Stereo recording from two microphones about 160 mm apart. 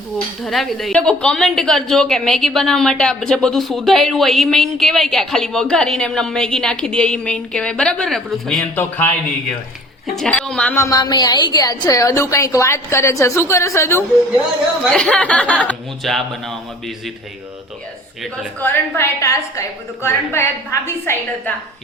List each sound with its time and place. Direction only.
0.4 s a woman's voice: centre (ahead or behind)
10.2 s a woman's voice: 5° left (ahead or behind)
10.8 s a woman's voice: 25° left (ahead or behind)
14.8 s a woman's voice: 5° left (ahead or behind)
18.6 s a woman's voice: 15° left (ahead or behind)